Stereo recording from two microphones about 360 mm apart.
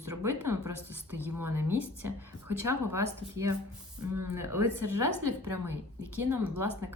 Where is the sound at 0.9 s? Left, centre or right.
Centre.